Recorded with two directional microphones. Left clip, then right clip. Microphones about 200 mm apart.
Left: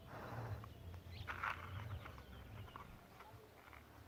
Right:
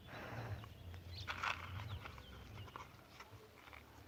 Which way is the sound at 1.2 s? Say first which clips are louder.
Right 2 dB; 40° right (ahead or behind).